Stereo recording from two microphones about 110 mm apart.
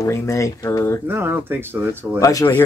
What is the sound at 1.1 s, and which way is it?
Speech, 20° right (ahead or behind).